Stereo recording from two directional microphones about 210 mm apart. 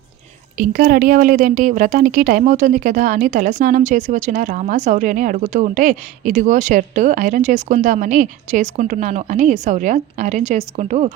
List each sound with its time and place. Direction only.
0.5 s a woman's voice: 40° right (ahead or behind)